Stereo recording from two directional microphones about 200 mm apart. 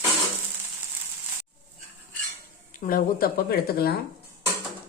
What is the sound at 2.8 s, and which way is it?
Speech, 45° left (ahead or behind).